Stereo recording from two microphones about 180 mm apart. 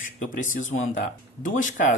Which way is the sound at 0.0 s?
45° left (ahead or behind).